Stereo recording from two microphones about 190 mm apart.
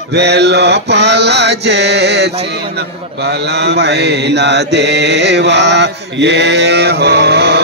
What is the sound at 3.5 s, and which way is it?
Mantra, 60° right (ahead or behind).